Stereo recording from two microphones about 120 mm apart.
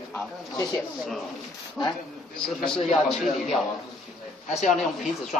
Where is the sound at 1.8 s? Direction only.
Centre (ahead or behind).